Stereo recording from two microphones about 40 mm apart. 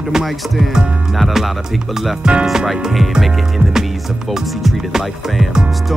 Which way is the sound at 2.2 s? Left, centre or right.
Right.